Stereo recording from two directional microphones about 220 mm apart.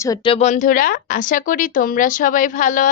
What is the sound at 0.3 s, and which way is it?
A woman's voice, 35° left (ahead or behind).